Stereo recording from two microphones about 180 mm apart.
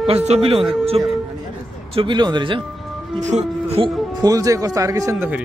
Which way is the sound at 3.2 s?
40° right (ahead or behind).